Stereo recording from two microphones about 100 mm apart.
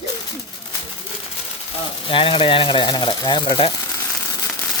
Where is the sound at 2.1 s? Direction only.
60° left (ahead or behind).